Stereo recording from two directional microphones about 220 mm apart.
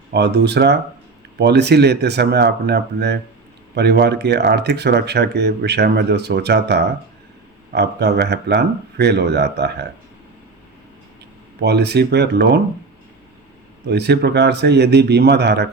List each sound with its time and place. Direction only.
0.1 s speech: 50° right (ahead or behind)
11.6 s speech: 50° right (ahead or behind)
13.8 s speech: 50° right (ahead or behind)